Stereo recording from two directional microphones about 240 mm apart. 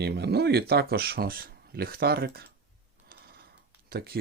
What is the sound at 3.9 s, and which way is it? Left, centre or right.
Speech, right.